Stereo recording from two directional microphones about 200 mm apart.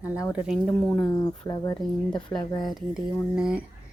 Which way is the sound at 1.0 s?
20° left (ahead or behind).